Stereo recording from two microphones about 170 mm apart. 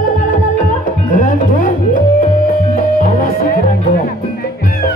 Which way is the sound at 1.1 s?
50° left (ahead or behind).